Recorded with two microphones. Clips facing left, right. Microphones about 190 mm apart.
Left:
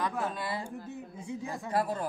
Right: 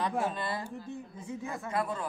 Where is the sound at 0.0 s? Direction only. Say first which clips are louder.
Right 2 dB; 25° right (ahead or behind).